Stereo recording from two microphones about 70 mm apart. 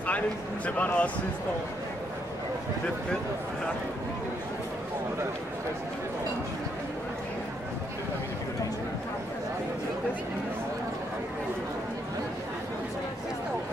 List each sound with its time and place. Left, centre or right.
0.7 s speech: left